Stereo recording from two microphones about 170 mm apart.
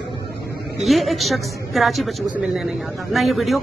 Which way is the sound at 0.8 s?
Centre (ahead or behind).